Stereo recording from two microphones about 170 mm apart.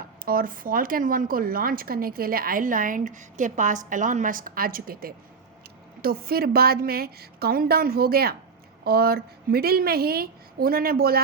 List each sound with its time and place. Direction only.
0.3 s speech: 55° right (ahead or behind)